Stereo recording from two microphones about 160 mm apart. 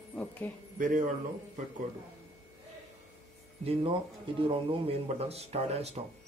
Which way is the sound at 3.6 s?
35° right (ahead or behind).